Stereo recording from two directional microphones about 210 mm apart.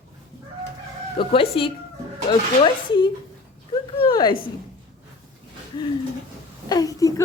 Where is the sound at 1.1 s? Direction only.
25° left (ahead or behind).